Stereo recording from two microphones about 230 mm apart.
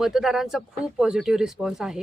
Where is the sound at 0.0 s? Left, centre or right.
Centre.